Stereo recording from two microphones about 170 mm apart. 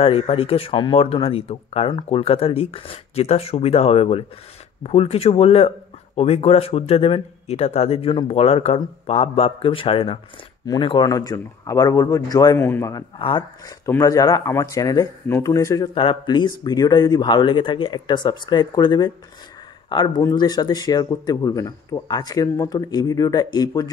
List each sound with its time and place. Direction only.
0.0 s speech: 35° left (ahead or behind); by 13.0 s 15° left (ahead or behind)
13.2 s speech: 30° left (ahead or behind)
13.8 s speech: 15° left (ahead or behind)